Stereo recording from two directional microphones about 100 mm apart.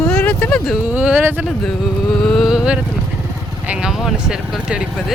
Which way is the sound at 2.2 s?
Centre (ahead or behind).